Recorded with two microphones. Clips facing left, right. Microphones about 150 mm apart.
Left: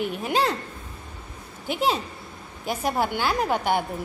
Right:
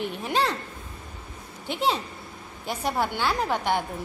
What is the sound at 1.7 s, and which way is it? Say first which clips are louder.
A woman's voice: left 2 dB; 10° left (ahead or behind).